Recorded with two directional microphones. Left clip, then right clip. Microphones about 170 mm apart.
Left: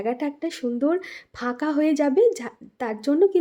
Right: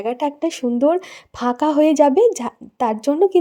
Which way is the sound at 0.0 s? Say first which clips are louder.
Right 6 dB; 35° right (ahead or behind).